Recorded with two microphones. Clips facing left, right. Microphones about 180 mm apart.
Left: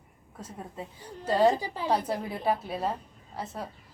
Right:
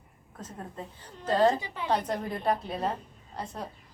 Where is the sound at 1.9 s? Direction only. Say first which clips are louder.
Even; 10° left (ahead or behind).